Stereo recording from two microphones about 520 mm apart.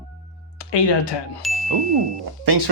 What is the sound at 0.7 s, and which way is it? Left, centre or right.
Speech, left.